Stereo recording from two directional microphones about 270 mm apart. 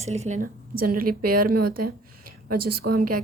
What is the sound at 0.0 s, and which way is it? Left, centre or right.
A woman's voice, right.